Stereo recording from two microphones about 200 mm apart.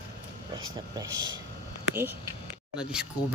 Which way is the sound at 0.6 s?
20° right (ahead or behind).